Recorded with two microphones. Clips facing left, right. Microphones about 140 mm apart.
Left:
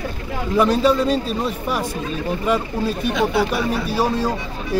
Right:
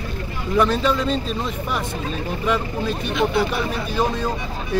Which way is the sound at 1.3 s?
10° left (ahead or behind).